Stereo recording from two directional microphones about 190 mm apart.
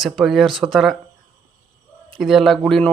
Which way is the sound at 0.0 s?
Centre (ahead or behind).